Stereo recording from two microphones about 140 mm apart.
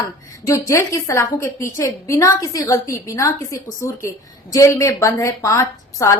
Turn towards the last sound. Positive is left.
turn(degrees=20)  # may be behind; listen again after turning